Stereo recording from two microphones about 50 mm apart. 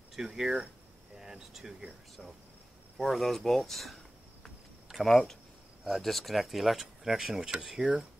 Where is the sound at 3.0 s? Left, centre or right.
Centre.